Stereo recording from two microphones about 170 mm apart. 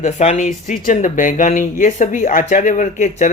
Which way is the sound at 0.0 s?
40° left (ahead or behind).